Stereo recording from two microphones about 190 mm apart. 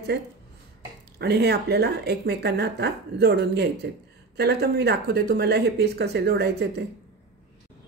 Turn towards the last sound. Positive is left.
turn(degrees=-60)  # may be behind; listen again after turning